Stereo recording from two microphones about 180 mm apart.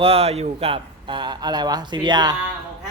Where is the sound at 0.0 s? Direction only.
35° right (ahead or behind).